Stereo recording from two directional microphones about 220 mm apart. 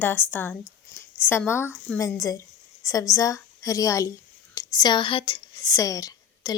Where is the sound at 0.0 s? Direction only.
10° left (ahead or behind).